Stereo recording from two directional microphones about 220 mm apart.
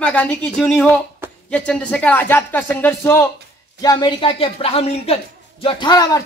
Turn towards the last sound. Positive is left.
turn(degrees=20)  # may be behind; listen again after turning